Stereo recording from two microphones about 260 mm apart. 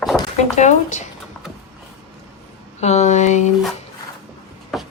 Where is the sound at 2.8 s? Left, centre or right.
Left.